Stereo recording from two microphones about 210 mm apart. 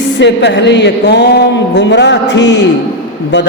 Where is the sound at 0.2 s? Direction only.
55° left (ahead or behind).